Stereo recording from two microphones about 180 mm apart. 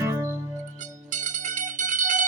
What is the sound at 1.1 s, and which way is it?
Music, 45° right (ahead or behind).